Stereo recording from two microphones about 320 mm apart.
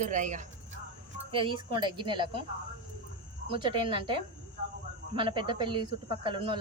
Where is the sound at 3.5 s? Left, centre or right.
Centre.